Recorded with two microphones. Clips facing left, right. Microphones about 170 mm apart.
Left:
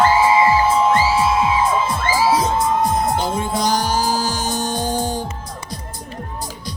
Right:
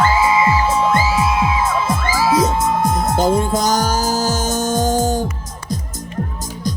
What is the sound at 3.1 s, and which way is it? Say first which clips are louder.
Music: right 5 dB; 45° right (ahead or behind).